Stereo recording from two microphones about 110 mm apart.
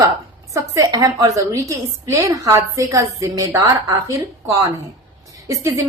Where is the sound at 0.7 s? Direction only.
30° right (ahead or behind).